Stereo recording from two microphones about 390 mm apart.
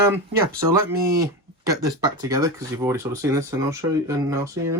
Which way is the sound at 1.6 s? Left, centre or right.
Centre.